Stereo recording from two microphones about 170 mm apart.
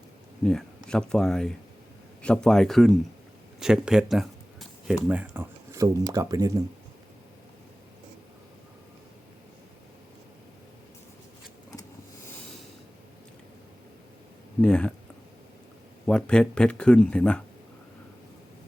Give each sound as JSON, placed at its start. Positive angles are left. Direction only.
{"t": 0.4, "sound": "speech", "side_deg": 5}
{"t": 14.6, "sound": "speech", "side_deg": 5}
{"t": 16.0, "sound": "speech", "side_deg": 5}